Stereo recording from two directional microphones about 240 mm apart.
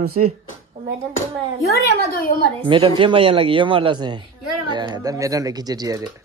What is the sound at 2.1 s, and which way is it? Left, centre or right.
Speech, left.